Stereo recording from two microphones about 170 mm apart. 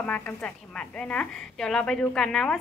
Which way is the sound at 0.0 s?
10° left (ahead or behind).